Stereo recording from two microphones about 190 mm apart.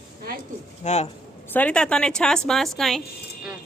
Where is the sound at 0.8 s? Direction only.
35° left (ahead or behind).